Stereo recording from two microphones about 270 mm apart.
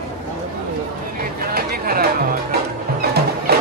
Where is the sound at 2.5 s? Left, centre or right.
Right.